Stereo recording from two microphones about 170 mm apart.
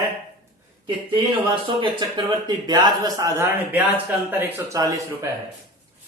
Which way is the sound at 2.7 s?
25° right (ahead or behind).